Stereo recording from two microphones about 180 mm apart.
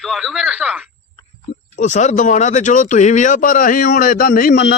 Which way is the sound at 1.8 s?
40° left (ahead or behind).